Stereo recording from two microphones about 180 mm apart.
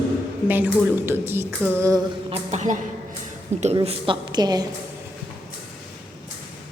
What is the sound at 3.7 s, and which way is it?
Speech, 30° right (ahead or behind).